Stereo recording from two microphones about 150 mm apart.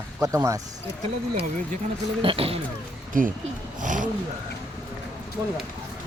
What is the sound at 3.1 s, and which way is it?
Speech, 65° right (ahead or behind).